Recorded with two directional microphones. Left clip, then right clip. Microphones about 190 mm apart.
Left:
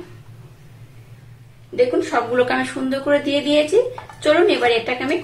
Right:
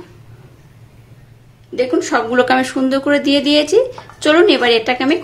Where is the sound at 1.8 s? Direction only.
55° right (ahead or behind).